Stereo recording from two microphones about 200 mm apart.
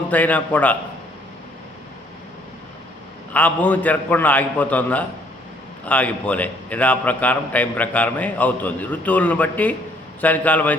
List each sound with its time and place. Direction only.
0.1 s a man's voice: 5° left (ahead or behind)
3.3 s a man's voice: 5° left (ahead or behind)